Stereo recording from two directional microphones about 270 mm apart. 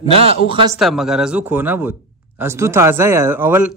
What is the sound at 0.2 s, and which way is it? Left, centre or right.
Speech, centre.